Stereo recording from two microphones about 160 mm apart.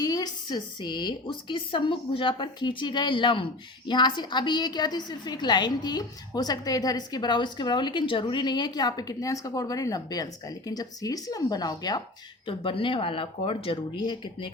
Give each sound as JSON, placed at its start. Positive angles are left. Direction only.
{"t": 0.0, "sound": "a woman's voice", "side_deg": 25}